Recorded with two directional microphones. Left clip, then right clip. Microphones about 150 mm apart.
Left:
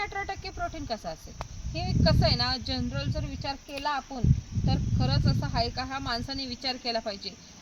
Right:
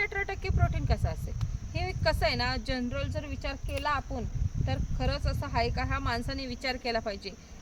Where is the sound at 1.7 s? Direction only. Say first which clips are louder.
Left 2 dB; 15° right (ahead or behind).